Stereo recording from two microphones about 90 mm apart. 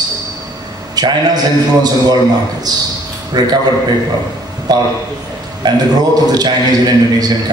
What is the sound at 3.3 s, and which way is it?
Speech, 50° right (ahead or behind).